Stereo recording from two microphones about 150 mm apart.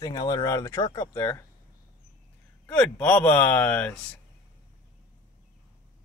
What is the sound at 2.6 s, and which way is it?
A man's voice, 5° left (ahead or behind).